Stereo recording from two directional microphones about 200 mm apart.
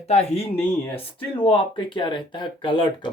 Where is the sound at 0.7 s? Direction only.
10° left (ahead or behind).